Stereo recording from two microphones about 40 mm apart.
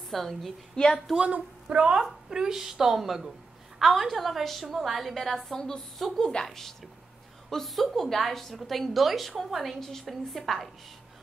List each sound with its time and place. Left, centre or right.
0.1 s a woman's voice: centre
0.7 s a woman's voice: centre
1.2 s a woman's voice: right
2.0 s a woman's voice: centre
6.1 s a woman's voice: centre
7.4 s a woman's voice: centre